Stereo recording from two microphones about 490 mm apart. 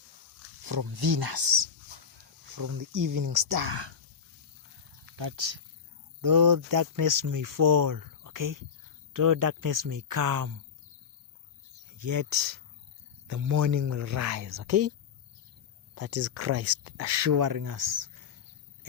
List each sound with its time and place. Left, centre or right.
0.6 s speech: right
2.6 s speech: right
3.7 s speech: right
5.1 s speech: right
6.2 s speech: right
11.9 s speech: right
16.0 s speech: right